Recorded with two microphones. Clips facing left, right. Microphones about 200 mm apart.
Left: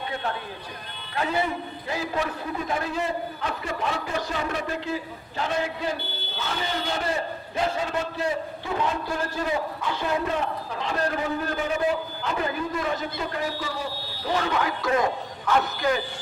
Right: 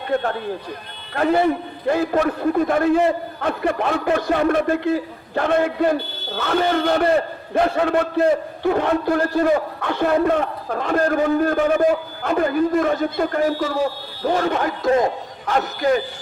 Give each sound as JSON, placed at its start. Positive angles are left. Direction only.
{"t": 1.1, "sound": "a man's voice", "side_deg": -50}